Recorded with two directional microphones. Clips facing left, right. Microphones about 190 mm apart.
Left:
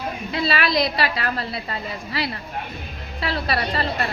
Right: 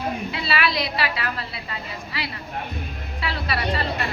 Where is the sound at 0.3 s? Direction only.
40° left (ahead or behind).